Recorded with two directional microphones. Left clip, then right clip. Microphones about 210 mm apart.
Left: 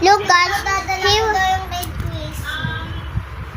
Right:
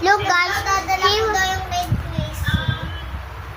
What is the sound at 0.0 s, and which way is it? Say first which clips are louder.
Child singing: left 4 dB; 15° left (ahead or behind).